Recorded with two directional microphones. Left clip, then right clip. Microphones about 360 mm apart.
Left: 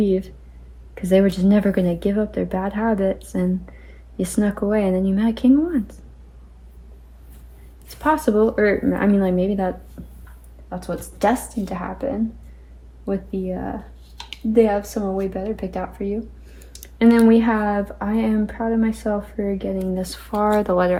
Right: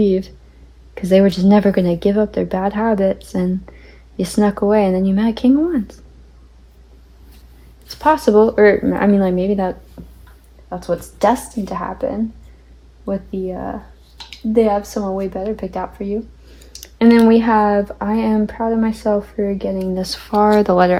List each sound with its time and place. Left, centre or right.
0.0 s speech: right
7.9 s speech: right
13.1 s speech: centre